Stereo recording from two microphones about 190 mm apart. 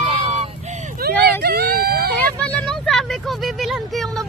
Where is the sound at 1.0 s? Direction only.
55° right (ahead or behind).